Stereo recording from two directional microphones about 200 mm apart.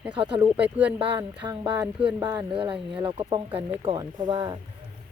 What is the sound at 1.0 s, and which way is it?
Speech, 20° right (ahead or behind).